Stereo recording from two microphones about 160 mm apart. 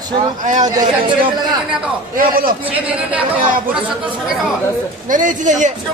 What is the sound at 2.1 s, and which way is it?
Speech, 65° right (ahead or behind).